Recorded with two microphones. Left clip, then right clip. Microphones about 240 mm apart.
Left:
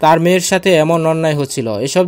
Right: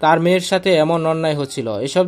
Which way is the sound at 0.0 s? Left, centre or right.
Left.